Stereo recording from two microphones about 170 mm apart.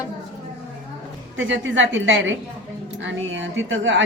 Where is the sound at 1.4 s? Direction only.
90° right.